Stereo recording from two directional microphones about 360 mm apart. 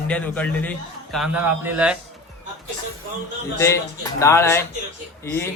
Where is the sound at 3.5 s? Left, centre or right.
Centre.